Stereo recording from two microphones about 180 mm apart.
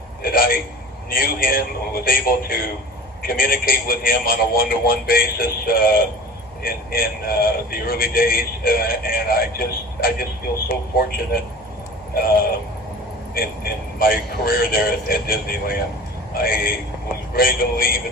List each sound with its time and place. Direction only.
0.2 s a sound: 55° left (ahead or behind)
1.1 s speech: 55° left (ahead or behind)
14.0 s speech: 55° left (ahead or behind)